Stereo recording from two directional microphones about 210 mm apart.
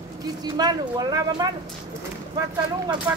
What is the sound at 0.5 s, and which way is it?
Speech, 20° right (ahead or behind).